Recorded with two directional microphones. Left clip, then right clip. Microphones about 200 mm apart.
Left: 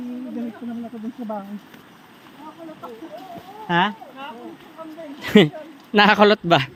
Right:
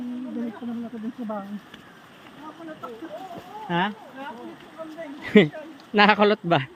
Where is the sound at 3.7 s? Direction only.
35° left (ahead or behind).